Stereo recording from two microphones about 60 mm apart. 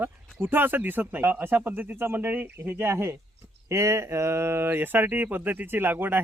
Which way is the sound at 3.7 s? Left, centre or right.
Right.